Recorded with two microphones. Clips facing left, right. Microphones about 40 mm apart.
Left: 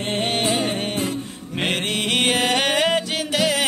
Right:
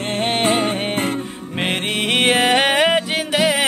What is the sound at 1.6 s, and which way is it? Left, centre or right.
Music, centre.